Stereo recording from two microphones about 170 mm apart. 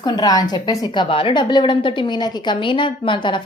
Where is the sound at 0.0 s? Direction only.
25° left (ahead or behind).